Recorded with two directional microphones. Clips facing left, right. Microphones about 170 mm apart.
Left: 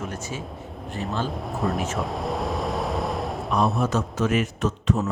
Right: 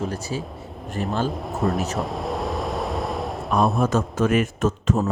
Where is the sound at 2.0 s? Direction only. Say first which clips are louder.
Right 1 dB; centre (ahead or behind).